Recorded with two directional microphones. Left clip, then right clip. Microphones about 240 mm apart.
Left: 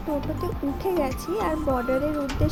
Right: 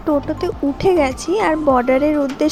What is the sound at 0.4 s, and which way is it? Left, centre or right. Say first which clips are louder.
A woman's voice: right 11 dB; right.